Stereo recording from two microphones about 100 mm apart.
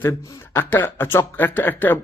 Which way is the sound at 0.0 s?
20° left (ahead or behind).